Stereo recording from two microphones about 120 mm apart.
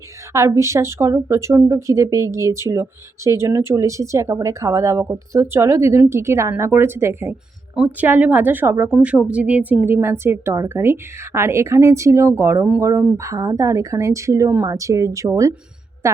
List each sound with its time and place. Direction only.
0.3 s a woman's voice: 25° right (ahead or behind)